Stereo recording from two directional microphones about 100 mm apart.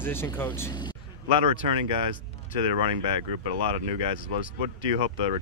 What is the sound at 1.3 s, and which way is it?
Speech, 70° right (ahead or behind).